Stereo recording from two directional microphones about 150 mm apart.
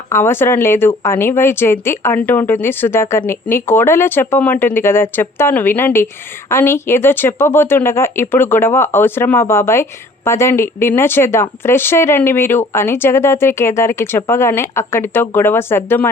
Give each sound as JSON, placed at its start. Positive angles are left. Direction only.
{"t": 0.1, "sound": "speech", "side_deg": 15}